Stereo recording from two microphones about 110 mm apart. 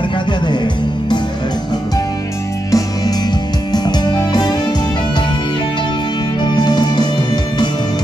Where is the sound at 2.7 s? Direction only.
35° left (ahead or behind).